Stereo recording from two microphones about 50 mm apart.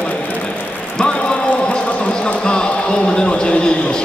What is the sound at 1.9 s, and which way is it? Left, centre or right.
Speech, left.